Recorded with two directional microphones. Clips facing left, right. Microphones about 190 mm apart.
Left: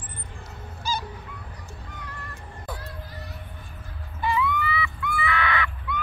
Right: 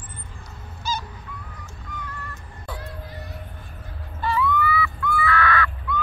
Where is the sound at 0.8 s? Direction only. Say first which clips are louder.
Right 1 dB; 10° left (ahead or behind).